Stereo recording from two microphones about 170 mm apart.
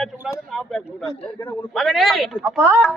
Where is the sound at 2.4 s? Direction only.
15° right (ahead or behind).